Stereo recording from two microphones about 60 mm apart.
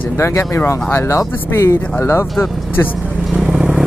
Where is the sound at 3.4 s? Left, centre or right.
Centre.